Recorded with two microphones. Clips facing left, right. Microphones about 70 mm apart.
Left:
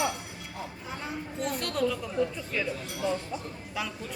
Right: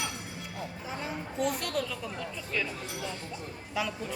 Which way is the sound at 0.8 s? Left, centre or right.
Centre.